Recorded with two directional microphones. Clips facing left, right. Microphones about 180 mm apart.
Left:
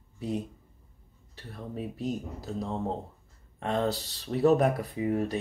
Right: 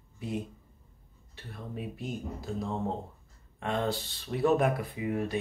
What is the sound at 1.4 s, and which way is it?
Speech, 35° left (ahead or behind).